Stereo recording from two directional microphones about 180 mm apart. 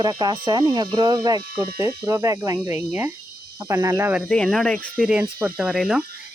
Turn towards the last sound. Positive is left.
turn(degrees=0)  # may be behind; listen again after turning